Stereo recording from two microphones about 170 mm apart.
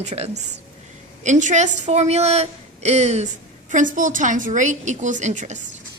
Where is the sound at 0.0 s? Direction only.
40° right (ahead or behind).